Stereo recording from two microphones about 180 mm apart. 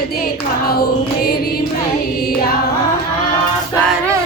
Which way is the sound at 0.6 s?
60° left (ahead or behind).